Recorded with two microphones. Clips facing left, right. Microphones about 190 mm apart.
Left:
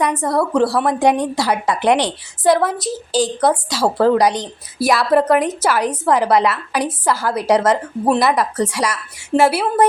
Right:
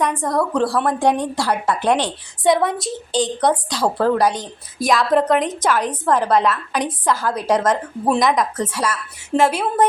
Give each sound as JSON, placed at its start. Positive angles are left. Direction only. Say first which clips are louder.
{"t": 0.2, "sound": "a woman's voice", "louder": "left 3 dB", "side_deg": 5}
{"t": 2.4, "sound": "a woman's voice", "louder": "left 2 dB", "side_deg": 0}